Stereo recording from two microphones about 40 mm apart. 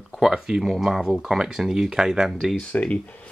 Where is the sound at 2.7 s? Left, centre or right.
Left.